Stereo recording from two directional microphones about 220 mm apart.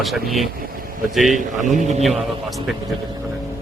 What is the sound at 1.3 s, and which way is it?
Speech, 35° right (ahead or behind).